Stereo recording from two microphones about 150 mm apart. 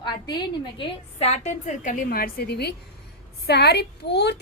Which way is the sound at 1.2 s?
50° left (ahead or behind).